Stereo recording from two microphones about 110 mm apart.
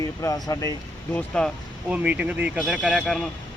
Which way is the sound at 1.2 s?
10° left (ahead or behind).